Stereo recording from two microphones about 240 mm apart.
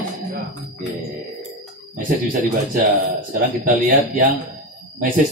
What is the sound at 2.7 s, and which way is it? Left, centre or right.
Speech, right.